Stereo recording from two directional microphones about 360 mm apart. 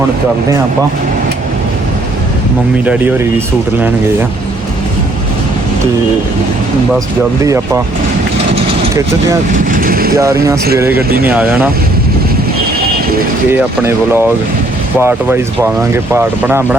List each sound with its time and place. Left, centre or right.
2.8 s speech: centre
8.5 s vehicle: centre
9.5 s speech: right
10.2 s speech: centre
13.5 s speech: centre